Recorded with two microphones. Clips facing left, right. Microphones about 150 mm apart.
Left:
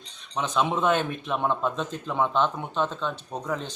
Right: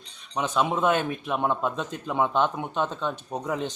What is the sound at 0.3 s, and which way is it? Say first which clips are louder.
Speech: even; 10° right (ahead or behind).